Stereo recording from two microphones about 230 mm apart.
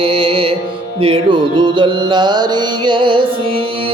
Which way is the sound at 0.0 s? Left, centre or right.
Right.